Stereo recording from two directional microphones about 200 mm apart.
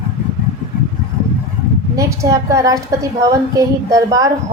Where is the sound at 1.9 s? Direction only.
15° right (ahead or behind).